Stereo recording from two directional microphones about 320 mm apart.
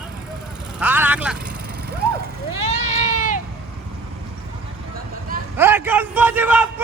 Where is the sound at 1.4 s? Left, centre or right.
Right.